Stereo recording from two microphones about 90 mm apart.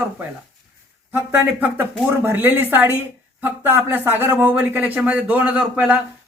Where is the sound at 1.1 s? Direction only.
25° right (ahead or behind).